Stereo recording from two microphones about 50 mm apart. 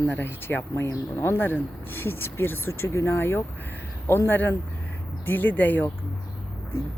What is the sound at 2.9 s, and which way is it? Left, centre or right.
Speech, left.